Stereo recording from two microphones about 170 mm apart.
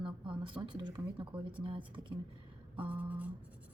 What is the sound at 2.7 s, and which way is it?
Speech, 10° right (ahead or behind).